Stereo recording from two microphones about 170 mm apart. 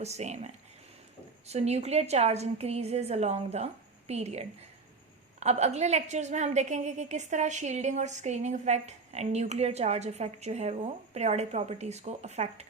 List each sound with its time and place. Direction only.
0.0 s a woman's voice: 40° right (ahead or behind)